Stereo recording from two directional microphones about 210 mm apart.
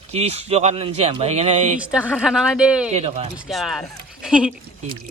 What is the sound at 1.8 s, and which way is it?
A woman's voice, 5° right (ahead or behind).